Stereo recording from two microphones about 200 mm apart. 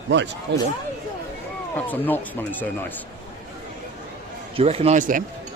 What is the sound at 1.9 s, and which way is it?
Speech, 10° left (ahead or behind).